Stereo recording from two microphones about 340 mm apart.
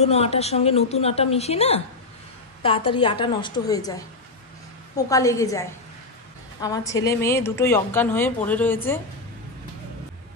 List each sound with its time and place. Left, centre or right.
0.0 s a woman's voice: centre